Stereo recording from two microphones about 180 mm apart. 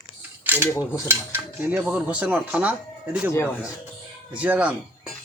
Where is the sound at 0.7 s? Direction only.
20° left (ahead or behind).